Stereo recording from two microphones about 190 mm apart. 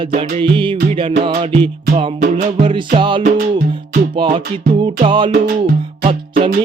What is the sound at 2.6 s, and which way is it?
Music, 30° right (ahead or behind).